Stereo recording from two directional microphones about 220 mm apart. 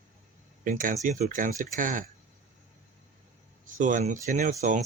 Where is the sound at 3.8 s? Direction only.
35° right (ahead or behind).